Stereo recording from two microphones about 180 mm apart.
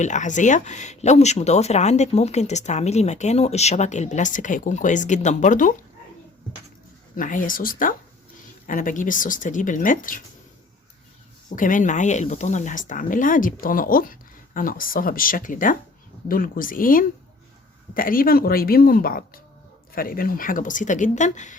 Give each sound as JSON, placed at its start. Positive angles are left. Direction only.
{"t": 0.0, "sound": "speech", "side_deg": 40}
{"t": 7.2, "sound": "speech", "side_deg": 50}
{"t": 11.4, "sound": "speech", "side_deg": 45}